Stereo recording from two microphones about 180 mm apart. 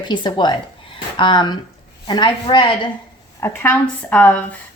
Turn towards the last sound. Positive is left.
turn(degrees=10)  # may be behind; listen again after turning